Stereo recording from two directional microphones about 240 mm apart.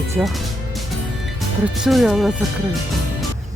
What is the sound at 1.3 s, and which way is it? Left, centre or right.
Speech, centre.